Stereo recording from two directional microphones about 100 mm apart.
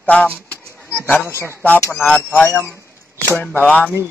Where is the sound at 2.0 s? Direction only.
10° left (ahead or behind).